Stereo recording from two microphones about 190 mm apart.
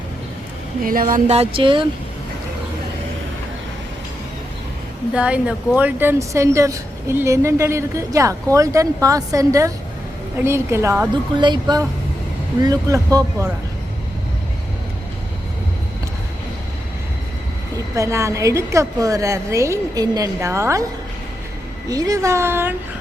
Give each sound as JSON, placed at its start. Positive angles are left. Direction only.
{"t": 0.9, "sound": "a sound", "side_deg": -45}
{"t": 5.1, "sound": "speech", "side_deg": -5}
{"t": 11.3, "sound": "speech", "side_deg": -25}
{"t": 17.9, "sound": "speech", "side_deg": -15}
{"t": 21.8, "sound": "speech", "side_deg": -20}